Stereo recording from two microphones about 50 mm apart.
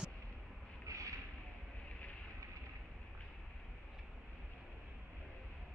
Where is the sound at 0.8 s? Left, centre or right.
Right.